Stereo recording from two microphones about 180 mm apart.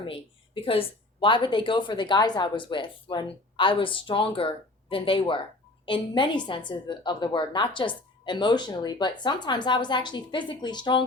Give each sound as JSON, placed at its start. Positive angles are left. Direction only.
{"t": 0.0, "sound": "a woman's voice", "side_deg": 30}